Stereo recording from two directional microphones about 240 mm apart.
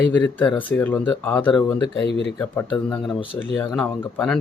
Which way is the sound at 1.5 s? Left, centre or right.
Centre.